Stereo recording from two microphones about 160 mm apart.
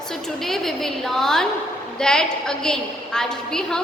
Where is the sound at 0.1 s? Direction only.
Centre (ahead or behind).